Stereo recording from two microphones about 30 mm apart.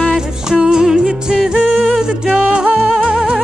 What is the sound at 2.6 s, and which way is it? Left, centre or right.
Music, right.